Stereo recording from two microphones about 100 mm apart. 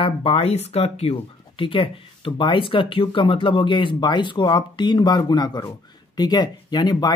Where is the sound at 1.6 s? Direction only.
55° left (ahead or behind).